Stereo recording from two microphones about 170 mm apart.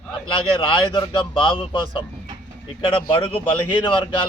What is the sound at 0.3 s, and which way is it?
Speech, 30° left (ahead or behind).